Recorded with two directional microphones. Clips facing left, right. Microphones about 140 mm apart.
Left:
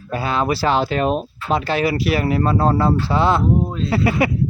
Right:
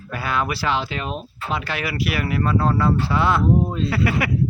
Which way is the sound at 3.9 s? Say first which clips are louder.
Left 4 dB; 25° left (ahead or behind).